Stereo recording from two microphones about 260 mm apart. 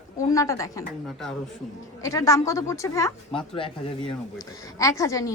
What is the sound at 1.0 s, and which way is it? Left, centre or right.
Speech, centre.